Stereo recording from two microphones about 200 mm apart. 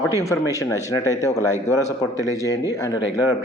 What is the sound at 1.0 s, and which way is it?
Speech, 15° right (ahead or behind).